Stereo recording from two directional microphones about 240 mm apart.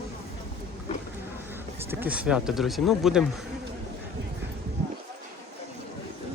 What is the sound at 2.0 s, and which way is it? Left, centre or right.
Speech, centre.